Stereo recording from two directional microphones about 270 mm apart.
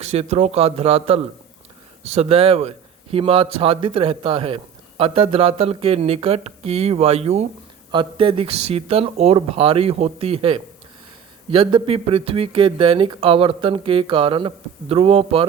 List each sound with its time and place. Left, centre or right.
0.1 s a man's voice: right